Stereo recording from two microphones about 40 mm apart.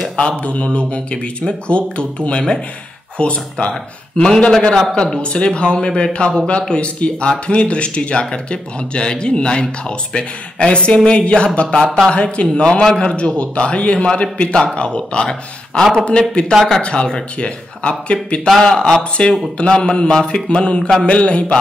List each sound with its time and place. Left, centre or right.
0.1 s speech: centre
0.4 s speech: left
4.2 s speech: centre
12.8 s speech: centre
13.1 s speech: left
16.1 s speech: left
18.5 s a man's voice: centre; by 21.5 s left